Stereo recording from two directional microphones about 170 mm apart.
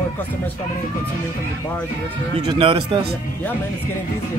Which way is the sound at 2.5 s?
30° right (ahead or behind).